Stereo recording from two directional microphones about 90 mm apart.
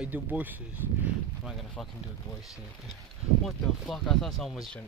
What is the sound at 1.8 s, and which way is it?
Speech, 5° left (ahead or behind).